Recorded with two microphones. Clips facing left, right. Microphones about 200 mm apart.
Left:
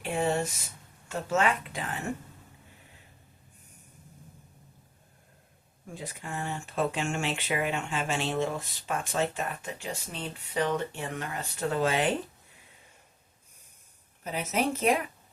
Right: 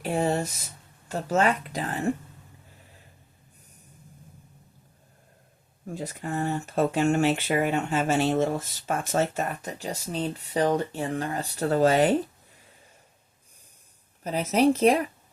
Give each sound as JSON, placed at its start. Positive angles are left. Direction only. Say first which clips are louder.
{"t": 0.0, "sound": "a sound", "louder": "right 3 dB", "side_deg": -40}
{"t": 1.0, "sound": "speech", "louder": "right 3 dB", "side_deg": -35}
{"t": 5.9, "sound": "speech", "louder": "right 7 dB", "side_deg": -40}
{"t": 14.3, "sound": "speech", "louder": "right 8 dB", "side_deg": -35}